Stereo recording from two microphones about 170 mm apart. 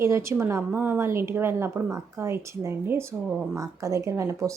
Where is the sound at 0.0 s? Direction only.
15° right (ahead or behind).